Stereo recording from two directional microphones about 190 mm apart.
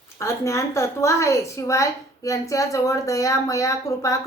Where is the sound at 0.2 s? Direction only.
15° left (ahead or behind).